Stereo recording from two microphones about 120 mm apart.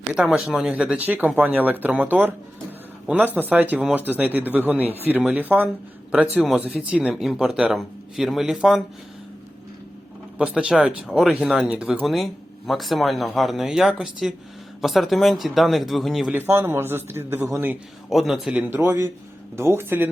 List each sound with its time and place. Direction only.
0.1 s speech: 5° right (ahead or behind)
6.3 s speech: centre (ahead or behind)
10.3 s speech: 10° right (ahead or behind)
16.3 s a man's voice: 15° right (ahead or behind)
18.1 s speech: centre (ahead or behind)
18.7 s a man's voice: 20° right (ahead or behind)